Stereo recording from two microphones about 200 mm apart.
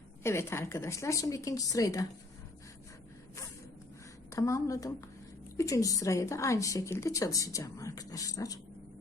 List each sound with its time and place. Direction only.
0.2 s a woman's voice: 10° left (ahead or behind)
4.3 s a woman's voice: 15° left (ahead or behind)